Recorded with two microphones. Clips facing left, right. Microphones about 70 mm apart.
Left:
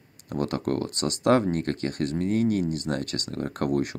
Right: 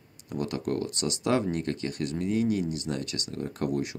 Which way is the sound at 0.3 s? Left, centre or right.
Left.